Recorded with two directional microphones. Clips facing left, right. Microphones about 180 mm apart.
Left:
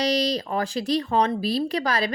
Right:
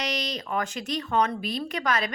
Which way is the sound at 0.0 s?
35° left (ahead or behind).